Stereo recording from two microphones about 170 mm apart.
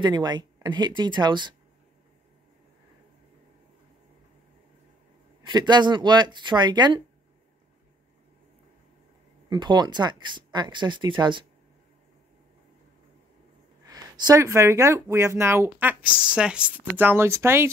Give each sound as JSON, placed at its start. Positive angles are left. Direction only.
{"t": 0.0, "sound": "speech", "side_deg": -25}
{"t": 5.4, "sound": "speech", "side_deg": -25}
{"t": 9.5, "sound": "speech", "side_deg": -25}
{"t": 13.8, "sound": "speech", "side_deg": -25}